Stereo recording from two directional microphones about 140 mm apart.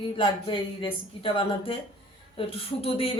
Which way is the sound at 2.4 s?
45° left (ahead or behind).